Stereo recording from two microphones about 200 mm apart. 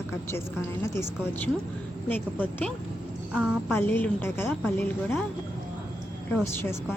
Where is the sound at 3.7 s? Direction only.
10° left (ahead or behind).